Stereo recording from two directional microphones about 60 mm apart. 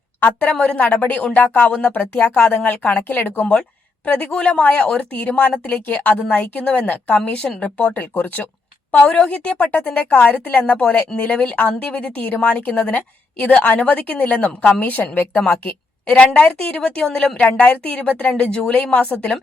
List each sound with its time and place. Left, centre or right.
0.2 s a woman's voice: left
0.5 s a woman's voice: centre
3.4 s a woman's voice: centre
6.6 s speech: centre
6.8 s a woman's voice: left
7.3 s a woman's voice: centre
10.8 s a woman's voice: centre